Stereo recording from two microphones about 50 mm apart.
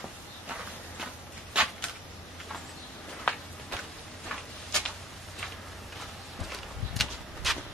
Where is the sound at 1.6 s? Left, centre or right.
Centre.